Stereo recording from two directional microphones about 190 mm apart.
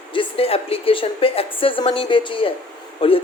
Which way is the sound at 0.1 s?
30° left (ahead or behind).